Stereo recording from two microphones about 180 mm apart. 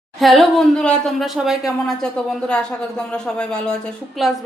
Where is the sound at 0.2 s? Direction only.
Centre (ahead or behind).